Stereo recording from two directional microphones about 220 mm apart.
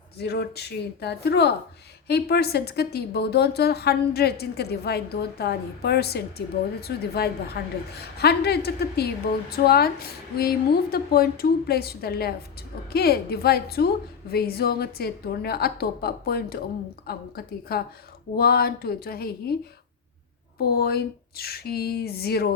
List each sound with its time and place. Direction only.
0.2 s a woman's voice: 45° left (ahead or behind)
20.6 s a woman's voice: 45° left (ahead or behind)